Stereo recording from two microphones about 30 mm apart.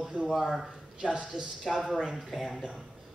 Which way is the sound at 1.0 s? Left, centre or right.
Right.